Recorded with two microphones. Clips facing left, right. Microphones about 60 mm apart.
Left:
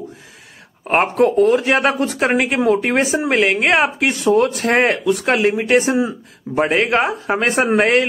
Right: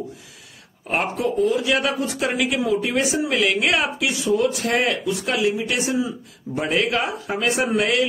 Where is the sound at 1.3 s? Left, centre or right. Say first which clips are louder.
Left 6 dB; left.